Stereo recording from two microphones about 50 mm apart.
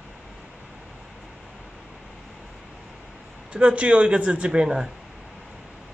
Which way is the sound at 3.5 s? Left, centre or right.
Right.